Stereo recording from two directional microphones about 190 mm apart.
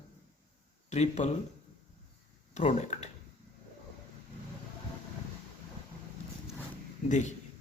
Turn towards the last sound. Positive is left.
turn(degrees=40)  # may be behind; listen again after turning